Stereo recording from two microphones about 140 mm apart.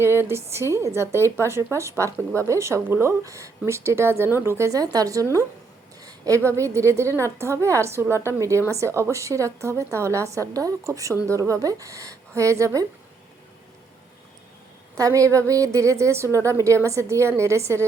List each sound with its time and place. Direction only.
0.0 s a woman's voice: 15° right (ahead or behind)
14.9 s a woman's voice: 25° right (ahead or behind)